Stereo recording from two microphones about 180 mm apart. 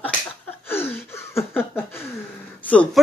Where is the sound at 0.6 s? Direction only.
10° left (ahead or behind).